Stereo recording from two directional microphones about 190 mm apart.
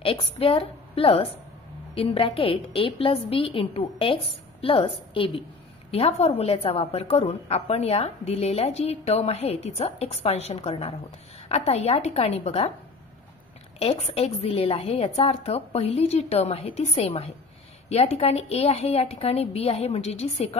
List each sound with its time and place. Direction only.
0.0 s a woman's voice: 30° left (ahead or behind)
13.7 s a woman's voice: 35° left (ahead or behind)